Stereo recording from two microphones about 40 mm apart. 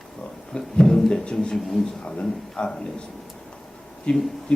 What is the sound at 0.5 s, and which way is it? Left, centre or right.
Speech, left.